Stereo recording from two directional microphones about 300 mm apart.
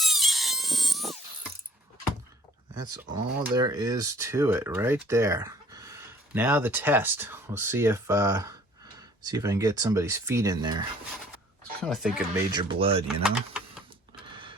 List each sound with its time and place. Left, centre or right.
0.0 s a sound: centre
2.7 s speech: centre
11.8 s speech: centre
12.5 s speech: centre